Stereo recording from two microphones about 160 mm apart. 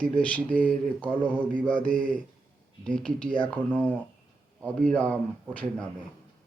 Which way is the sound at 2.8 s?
5° left (ahead or behind).